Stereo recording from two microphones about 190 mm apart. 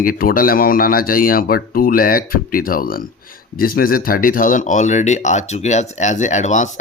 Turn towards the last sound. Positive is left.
turn(degrees=40)  # may be behind; listen again after turning